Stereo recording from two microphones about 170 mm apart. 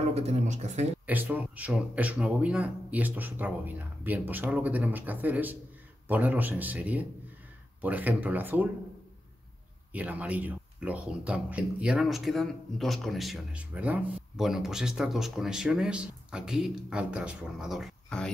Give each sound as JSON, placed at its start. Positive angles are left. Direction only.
{"t": 0.1, "sound": "speech", "side_deg": -40}
{"t": 1.0, "sound": "speech", "side_deg": -10}
{"t": 9.9, "sound": "speech", "side_deg": -10}